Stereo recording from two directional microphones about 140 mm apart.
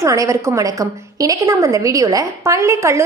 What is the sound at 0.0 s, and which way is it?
A woman's voice, 20° right (ahead or behind).